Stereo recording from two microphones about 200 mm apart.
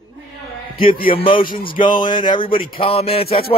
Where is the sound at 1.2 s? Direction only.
25° left (ahead or behind).